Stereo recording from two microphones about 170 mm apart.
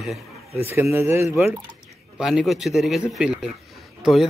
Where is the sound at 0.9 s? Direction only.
15° right (ahead or behind).